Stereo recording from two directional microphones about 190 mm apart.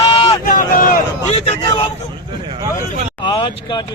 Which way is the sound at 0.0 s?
30° left (ahead or behind).